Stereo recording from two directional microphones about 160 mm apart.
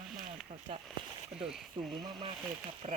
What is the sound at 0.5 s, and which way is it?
Speech, 30° right (ahead or behind).